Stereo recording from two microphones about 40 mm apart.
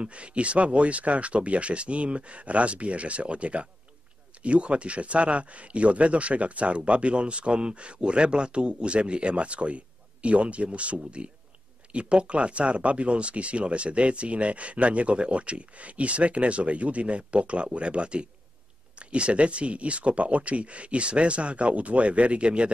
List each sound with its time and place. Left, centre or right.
0.0 s speech: right